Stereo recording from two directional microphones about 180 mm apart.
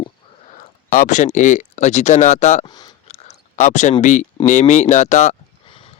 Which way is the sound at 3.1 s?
40° left (ahead or behind).